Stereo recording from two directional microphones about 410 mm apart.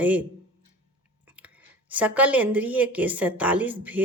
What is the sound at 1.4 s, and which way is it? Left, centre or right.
Speech, centre.